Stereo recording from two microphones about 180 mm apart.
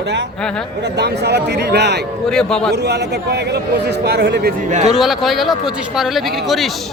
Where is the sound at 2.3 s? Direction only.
5° left (ahead or behind).